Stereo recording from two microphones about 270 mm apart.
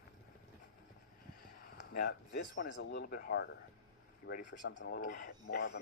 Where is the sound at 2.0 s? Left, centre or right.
Left.